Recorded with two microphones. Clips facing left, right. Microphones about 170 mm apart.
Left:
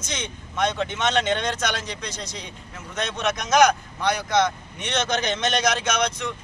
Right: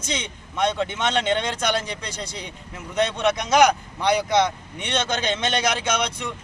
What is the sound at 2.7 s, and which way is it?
A man's voice, 15° right (ahead or behind).